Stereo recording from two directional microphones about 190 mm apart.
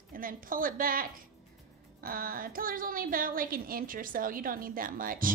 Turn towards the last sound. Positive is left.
turn(degrees=-45)  # may be behind; listen again after turning